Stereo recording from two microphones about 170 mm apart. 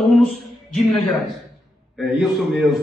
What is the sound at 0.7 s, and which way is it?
A man's voice, centre (ahead or behind).